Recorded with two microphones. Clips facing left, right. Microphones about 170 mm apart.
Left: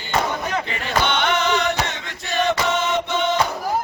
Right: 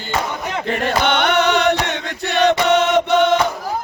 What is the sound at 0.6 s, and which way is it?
Chant, 55° right (ahead or behind).